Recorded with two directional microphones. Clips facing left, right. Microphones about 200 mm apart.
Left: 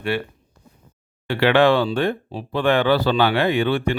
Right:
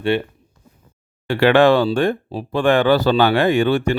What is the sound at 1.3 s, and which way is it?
Speech, 45° right (ahead or behind).